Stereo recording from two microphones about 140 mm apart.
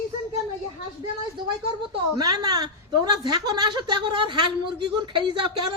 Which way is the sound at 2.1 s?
30° right (ahead or behind).